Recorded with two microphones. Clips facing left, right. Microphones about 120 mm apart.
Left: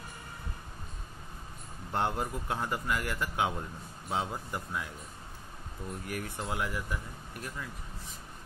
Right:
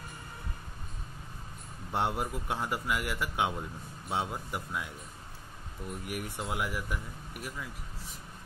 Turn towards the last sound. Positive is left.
turn(degrees=-5)  # may be behind; listen again after turning